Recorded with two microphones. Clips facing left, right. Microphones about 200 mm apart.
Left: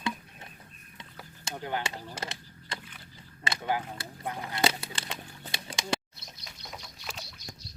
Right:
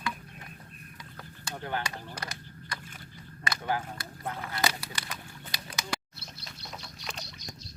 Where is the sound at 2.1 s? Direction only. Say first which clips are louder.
Left 2 dB; 25° left (ahead or behind).